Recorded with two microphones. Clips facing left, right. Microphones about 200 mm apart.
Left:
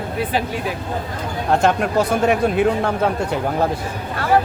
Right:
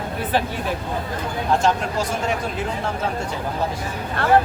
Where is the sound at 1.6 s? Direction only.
60° left (ahead or behind).